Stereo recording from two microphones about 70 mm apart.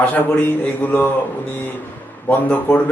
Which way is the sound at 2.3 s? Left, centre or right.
Left.